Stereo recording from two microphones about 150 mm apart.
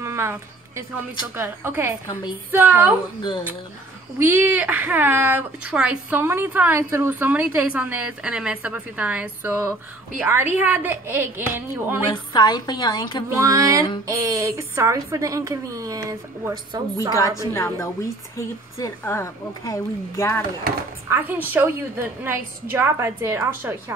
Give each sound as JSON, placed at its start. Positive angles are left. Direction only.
{"t": 0.0, "sound": "a sound", "side_deg": -15}
{"t": 1.3, "sound": "speech", "side_deg": -15}
{"t": 3.2, "sound": "speech", "side_deg": 30}
{"t": 4.2, "sound": "speech", "side_deg": -15}
{"t": 12.1, "sound": "a woman's voice", "side_deg": 30}
{"t": 13.3, "sound": "a woman's voice", "side_deg": -20}
{"t": 17.5, "sound": "a woman's voice", "side_deg": 20}
{"t": 21.1, "sound": "speech", "side_deg": -10}